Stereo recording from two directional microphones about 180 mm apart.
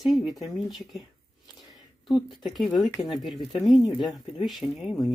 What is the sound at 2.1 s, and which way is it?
Speech, centre (ahead or behind).